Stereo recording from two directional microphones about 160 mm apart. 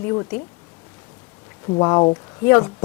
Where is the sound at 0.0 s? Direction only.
15° left (ahead or behind).